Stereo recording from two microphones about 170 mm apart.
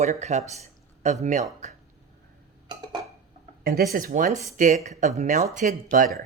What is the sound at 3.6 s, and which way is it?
Speech, 60° right (ahead or behind).